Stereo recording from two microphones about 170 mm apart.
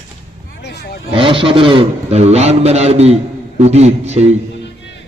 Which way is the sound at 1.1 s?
30° right (ahead or behind).